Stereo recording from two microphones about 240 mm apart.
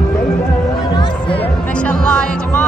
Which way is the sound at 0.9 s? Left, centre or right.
Centre.